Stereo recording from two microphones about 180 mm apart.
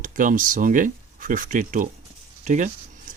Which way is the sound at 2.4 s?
45° right (ahead or behind).